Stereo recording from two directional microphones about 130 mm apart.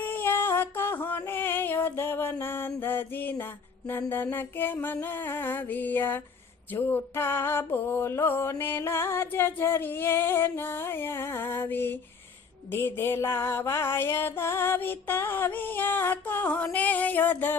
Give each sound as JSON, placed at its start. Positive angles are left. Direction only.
{"t": 0.0, "sound": "music", "side_deg": 15}
{"t": 3.8, "sound": "mantra", "side_deg": 15}